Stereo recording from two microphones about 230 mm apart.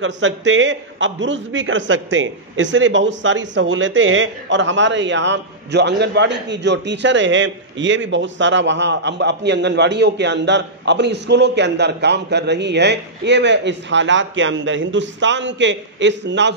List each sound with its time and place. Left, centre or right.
0.0 s a man's voice: right